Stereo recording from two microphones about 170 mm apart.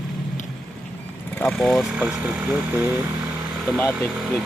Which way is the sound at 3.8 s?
10° left (ahead or behind).